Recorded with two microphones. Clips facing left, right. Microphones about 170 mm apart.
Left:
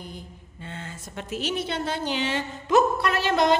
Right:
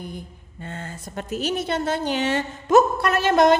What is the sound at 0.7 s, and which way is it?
A woman's voice, 45° right (ahead or behind).